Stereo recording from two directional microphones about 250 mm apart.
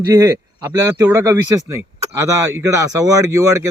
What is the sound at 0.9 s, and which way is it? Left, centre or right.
A man's voice, centre.